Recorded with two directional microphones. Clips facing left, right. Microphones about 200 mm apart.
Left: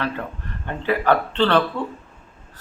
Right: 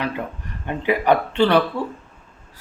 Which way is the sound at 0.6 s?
15° right (ahead or behind).